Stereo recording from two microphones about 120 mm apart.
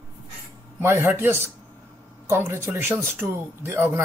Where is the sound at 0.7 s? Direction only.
15° right (ahead or behind).